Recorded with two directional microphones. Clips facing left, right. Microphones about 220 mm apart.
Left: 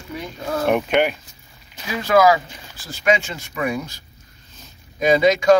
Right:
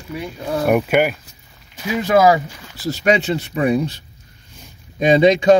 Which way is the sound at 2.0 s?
25° right (ahead or behind).